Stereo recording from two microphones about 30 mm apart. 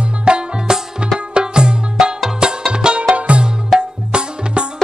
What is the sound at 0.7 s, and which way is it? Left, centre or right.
Music, right.